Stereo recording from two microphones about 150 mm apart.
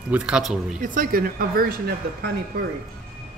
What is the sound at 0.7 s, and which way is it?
Speech, 65° right (ahead or behind).